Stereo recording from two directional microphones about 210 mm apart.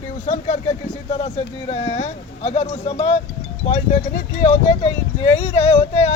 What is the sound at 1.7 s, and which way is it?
Speech, 30° left (ahead or behind).